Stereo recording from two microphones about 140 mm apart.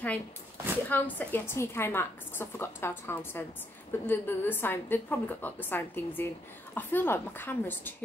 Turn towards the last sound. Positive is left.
turn(degrees=15)  # may be behind; listen again after turning